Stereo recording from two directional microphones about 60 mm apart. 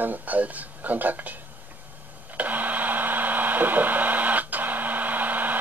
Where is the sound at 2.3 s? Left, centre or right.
Right.